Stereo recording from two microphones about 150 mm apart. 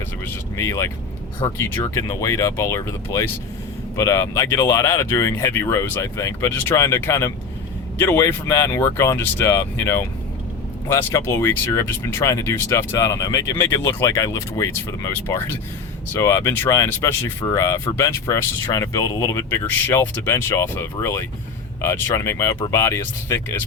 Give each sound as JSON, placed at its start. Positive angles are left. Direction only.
{"t": 0.3, "sound": "speech", "side_deg": 20}